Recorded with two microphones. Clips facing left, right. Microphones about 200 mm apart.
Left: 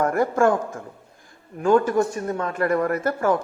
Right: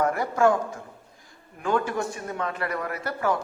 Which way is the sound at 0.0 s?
50° left (ahead or behind).